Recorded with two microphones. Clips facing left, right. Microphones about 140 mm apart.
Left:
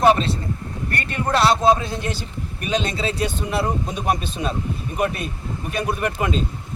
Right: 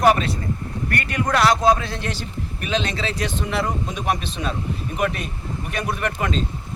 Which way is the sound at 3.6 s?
35° left (ahead or behind).